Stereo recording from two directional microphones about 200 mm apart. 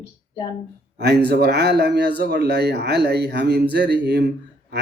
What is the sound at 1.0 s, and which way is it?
A man's voice, 55° right (ahead or behind).